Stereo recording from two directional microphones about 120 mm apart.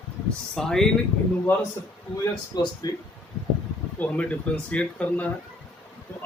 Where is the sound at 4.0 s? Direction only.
10° left (ahead or behind).